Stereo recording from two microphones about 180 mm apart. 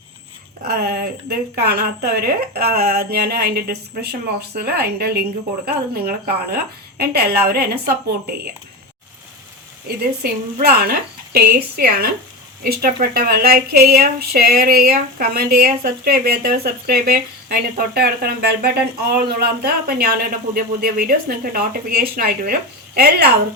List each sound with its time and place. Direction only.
0.6 s speech: 55° right (ahead or behind)
10.2 s speech: 60° right (ahead or behind)